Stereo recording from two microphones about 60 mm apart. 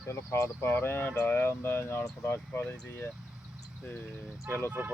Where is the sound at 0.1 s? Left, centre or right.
Left.